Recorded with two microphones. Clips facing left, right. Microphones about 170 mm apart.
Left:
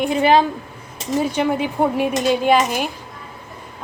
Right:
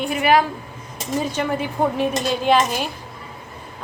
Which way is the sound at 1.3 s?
15° left (ahead or behind).